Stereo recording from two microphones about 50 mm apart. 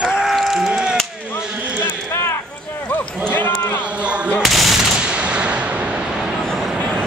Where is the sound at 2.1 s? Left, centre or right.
Left.